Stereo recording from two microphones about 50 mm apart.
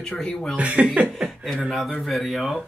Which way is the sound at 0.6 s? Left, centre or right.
Right.